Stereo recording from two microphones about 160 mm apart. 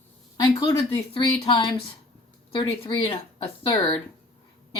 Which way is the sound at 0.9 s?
30° left (ahead or behind).